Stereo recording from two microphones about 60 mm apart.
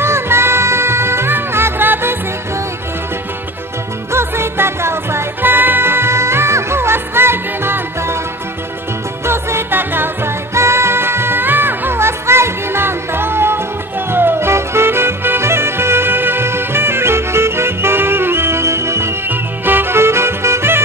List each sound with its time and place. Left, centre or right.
0.0 s music: right
4.1 s music: right
9.2 s music: right
19.2 s music: right